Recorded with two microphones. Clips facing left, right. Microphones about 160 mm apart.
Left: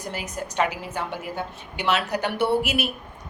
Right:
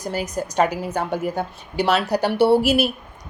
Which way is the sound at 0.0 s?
40° right (ahead or behind).